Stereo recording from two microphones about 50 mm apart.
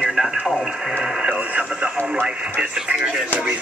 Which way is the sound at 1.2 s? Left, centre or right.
Right.